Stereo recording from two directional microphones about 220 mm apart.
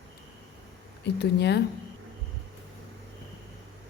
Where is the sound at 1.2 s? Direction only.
50° left (ahead or behind).